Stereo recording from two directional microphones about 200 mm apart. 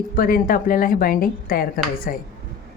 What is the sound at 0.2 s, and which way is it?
Speech, 45° left (ahead or behind).